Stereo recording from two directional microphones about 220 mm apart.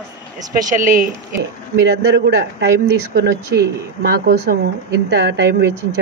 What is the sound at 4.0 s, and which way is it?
A woman's voice, 45° right (ahead or behind).